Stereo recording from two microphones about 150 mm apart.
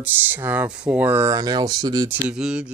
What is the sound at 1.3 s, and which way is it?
Speech, 25° right (ahead or behind).